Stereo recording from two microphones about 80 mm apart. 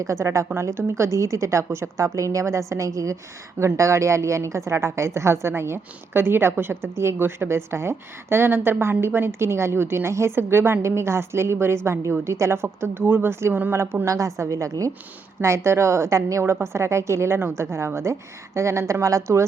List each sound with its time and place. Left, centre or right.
0.0 s a woman's voice: right